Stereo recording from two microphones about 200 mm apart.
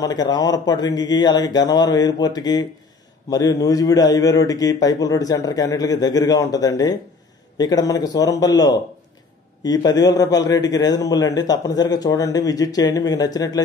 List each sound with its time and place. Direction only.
0.0 s a man's voice: 20° left (ahead or behind)